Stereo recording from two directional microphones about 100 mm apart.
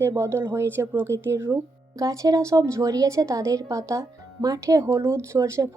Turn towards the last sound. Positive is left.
turn(degrees=-30)  # may be behind; listen again after turning